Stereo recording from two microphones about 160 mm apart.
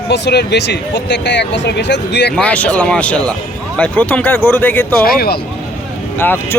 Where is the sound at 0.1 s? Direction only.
90° left.